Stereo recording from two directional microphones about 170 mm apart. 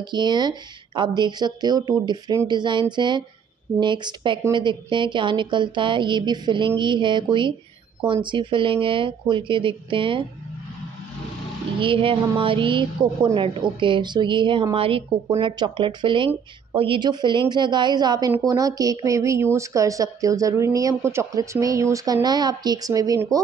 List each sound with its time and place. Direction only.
0.0 s speech: 25° right (ahead or behind)
11.8 s speech: 30° right (ahead or behind)